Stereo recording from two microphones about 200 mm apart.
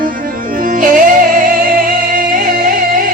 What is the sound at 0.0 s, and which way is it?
Music, 45° right (ahead or behind).